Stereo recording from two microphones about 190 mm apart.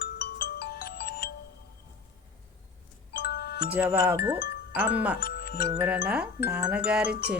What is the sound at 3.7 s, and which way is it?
Speech, 10° right (ahead or behind).